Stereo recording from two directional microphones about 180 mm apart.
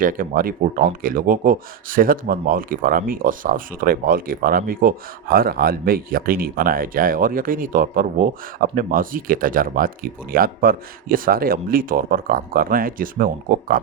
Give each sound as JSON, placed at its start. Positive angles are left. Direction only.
{"t": 0.0, "sound": "speech", "side_deg": -50}